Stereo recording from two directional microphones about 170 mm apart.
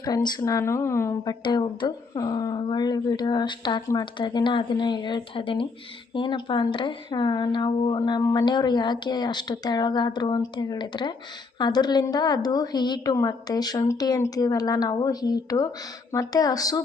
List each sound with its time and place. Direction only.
0.0 s speech: 25° left (ahead or behind)